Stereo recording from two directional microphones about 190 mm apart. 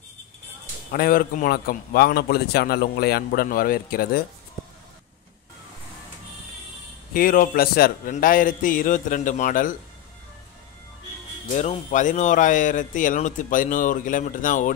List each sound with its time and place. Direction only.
0.9 s speech: 50° left (ahead or behind)
7.2 s speech: 50° left (ahead or behind)
11.4 s speech: 40° left (ahead or behind)